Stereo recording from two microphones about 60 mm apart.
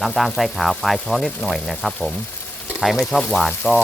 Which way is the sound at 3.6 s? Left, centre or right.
Left.